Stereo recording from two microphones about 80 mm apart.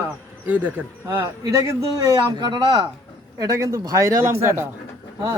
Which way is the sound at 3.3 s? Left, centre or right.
Right.